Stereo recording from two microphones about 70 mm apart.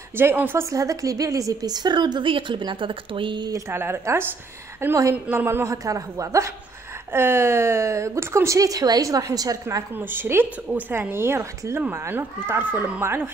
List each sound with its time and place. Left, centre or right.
0.1 s speech: right
0.7 s a woman's voice: right
3.7 s speech: right
5.7 s a woman's voice: right
7.1 s a woman's voice: right
9.9 s speech: right